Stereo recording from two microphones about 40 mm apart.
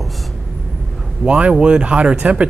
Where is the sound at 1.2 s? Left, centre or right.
Right.